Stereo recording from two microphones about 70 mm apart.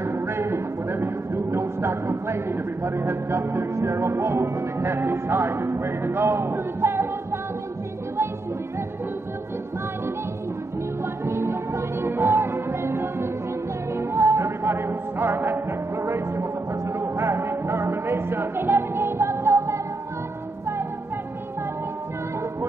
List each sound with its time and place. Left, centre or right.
0.0 s speech: right
11.2 s music: right